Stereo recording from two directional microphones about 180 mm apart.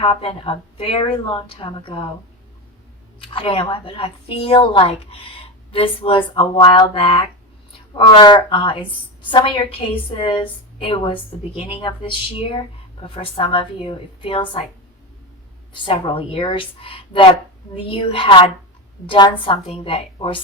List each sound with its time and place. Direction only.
0.0 s a woman's voice: 30° left (ahead or behind)
3.2 s a woman's voice: 30° left (ahead or behind)
15.7 s a woman's voice: 30° left (ahead or behind)